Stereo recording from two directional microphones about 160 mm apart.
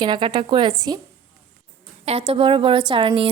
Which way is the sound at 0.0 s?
30° right (ahead or behind).